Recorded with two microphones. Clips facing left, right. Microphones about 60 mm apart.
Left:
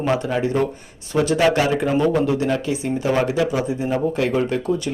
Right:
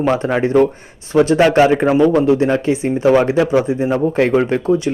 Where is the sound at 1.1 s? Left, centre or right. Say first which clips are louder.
Right 6 dB; right.